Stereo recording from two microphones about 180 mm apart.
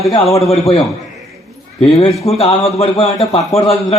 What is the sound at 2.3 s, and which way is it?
A man's voice, 35° left (ahead or behind).